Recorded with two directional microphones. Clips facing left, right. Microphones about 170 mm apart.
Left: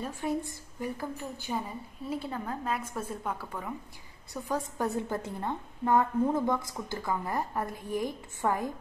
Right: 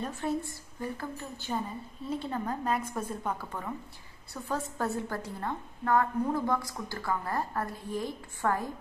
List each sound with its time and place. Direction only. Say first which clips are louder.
0.0 s a woman's voice: even; 15° left (ahead or behind)